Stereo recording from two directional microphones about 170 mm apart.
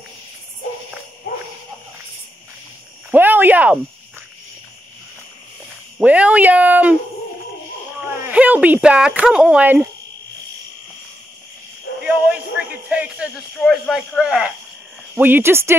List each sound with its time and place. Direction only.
1.3 s jingle bell: 60° left (ahead or behind)
3.1 s a sound: 10° right (ahead or behind)
5.9 s speech: 5° right (ahead or behind)
8.3 s speech: 10° right (ahead or behind)
12.0 s a sound: 5° right (ahead or behind)
15.1 s speech: 10° right (ahead or behind)